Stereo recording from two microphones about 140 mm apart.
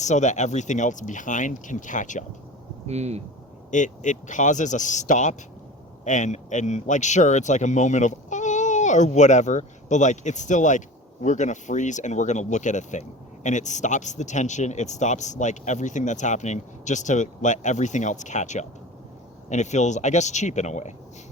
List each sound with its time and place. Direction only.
0.0 s speech: 55° left (ahead or behind)
2.8 s speech: 50° right (ahead or behind)
3.7 s speech: 60° left (ahead or behind)